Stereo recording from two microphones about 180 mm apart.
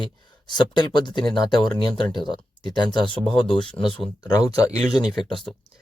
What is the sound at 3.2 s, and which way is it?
Speech, centre (ahead or behind).